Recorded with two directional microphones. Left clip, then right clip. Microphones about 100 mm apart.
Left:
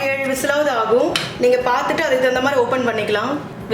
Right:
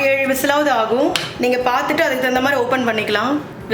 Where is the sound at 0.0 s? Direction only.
25° right (ahead or behind).